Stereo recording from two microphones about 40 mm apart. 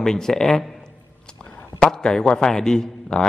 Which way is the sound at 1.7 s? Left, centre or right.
Centre.